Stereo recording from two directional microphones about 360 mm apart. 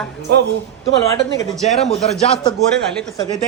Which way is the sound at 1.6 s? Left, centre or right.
Centre.